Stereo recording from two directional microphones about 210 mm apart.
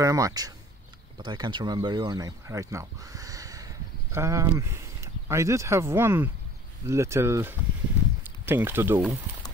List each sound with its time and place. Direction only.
0.0 s speech: 15° right (ahead or behind)